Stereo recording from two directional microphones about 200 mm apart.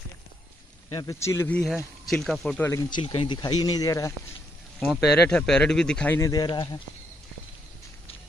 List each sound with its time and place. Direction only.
0.8 s speech: 20° left (ahead or behind)
2.0 s speech: centre (ahead or behind)
2.6 s speech: 15° left (ahead or behind)
4.7 s speech: 5° left (ahead or behind); by 6.8 s 20° left (ahead or behind)